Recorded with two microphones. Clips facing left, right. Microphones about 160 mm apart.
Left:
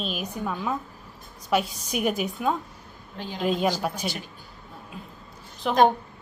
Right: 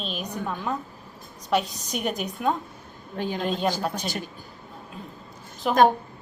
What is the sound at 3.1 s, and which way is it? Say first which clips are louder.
Speech: right 7 dB; 55° right (ahead or behind).